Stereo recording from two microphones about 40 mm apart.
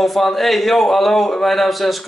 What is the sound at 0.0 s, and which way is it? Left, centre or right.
Speech, centre.